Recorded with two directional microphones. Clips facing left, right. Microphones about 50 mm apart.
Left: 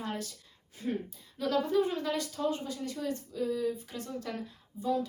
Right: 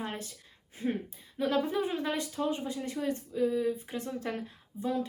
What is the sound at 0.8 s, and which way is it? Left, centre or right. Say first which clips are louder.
Speech: right 2 dB; right.